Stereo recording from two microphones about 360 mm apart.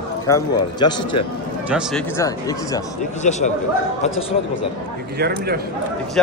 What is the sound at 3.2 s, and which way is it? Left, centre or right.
Speech, centre.